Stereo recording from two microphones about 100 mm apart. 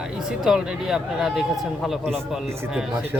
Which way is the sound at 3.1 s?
20° right (ahead or behind).